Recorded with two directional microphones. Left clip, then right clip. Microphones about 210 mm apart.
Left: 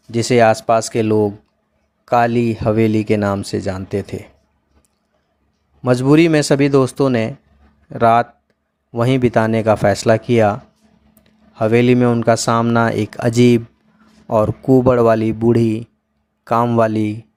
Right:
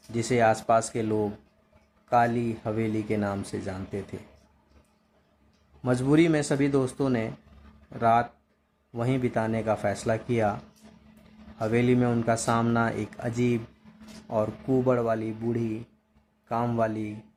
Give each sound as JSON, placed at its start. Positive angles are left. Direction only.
{"t": 0.1, "sound": "speech", "side_deg": 40}
{"t": 5.8, "sound": "speech", "side_deg": 40}